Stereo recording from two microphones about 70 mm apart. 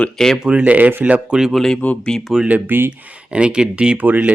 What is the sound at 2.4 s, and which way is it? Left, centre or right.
Speech, right.